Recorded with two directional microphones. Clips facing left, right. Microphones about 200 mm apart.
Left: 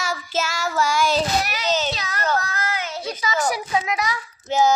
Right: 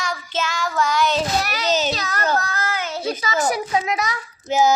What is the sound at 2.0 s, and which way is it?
A child's voice, 40° right (ahead or behind).